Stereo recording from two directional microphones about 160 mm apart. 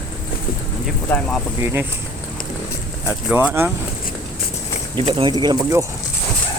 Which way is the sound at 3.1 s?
10° right (ahead or behind).